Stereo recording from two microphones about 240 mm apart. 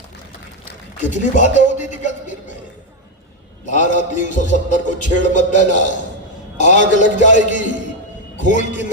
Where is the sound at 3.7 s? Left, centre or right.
Left.